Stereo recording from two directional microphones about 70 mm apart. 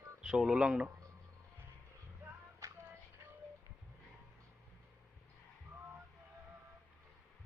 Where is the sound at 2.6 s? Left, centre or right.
Right.